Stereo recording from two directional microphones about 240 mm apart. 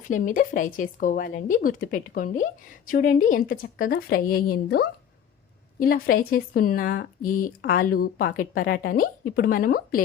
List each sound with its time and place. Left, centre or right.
0.1 s speech: left